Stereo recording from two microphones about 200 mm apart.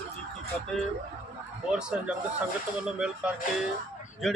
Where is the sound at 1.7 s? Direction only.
5° right (ahead or behind).